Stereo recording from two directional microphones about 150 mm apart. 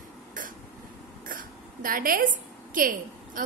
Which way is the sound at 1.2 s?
65° right (ahead or behind).